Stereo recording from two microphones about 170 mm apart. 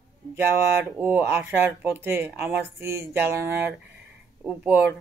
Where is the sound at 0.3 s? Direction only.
15° right (ahead or behind).